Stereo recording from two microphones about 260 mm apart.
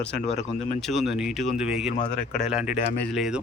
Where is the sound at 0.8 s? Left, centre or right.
Centre.